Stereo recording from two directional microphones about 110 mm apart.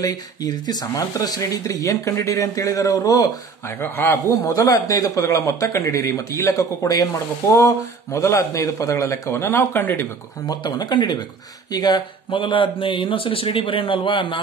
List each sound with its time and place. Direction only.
0.0 s speech: 35° left (ahead or behind)
3.8 s speech: 20° left (ahead or behind)
4.4 s speech: 30° left (ahead or behind)
10.4 s speech: 40° left (ahead or behind)